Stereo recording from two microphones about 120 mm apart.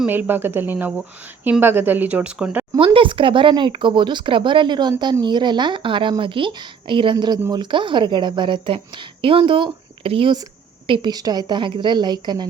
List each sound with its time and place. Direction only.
0.1 s speech: 15° right (ahead or behind)
2.7 s a woman's voice: 45° right (ahead or behind)
11.1 s speech: 35° right (ahead or behind)